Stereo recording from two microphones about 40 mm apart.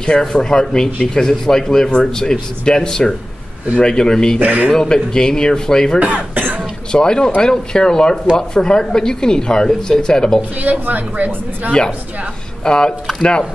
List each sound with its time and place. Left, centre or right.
0.2 s speech: centre
4.4 s speech: right
4.6 s speech: centre
5.9 s speech: right
6.9 s speech: centre
10.6 s speech: right
12.6 s speech: left